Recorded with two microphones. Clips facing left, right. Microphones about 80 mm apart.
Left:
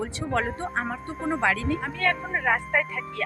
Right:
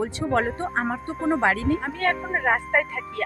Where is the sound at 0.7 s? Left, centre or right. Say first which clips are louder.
Right 3 dB; right.